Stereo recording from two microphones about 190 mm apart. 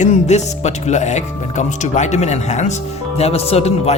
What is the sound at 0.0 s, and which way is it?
Speech, 40° left (ahead or behind).